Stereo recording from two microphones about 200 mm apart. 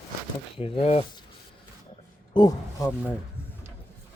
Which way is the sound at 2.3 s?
20° left (ahead or behind).